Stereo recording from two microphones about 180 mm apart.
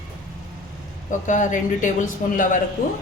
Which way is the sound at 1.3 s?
45° left (ahead or behind).